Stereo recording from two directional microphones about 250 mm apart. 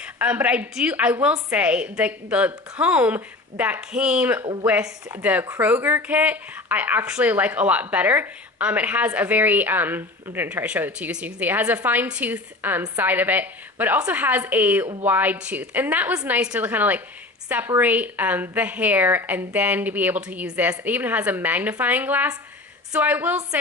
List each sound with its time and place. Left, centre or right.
0.0 s a woman's voice: centre